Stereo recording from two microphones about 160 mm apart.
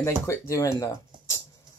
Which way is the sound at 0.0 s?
15° left (ahead or behind).